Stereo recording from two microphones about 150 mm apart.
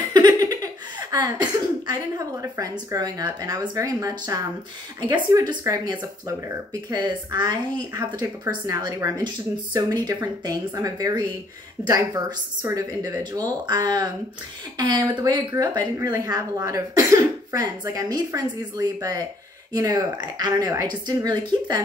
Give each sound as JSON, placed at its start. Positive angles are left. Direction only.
{"t": 0.1, "sound": "laughter", "side_deg": -25}
{"t": 1.1, "sound": "speech", "side_deg": -25}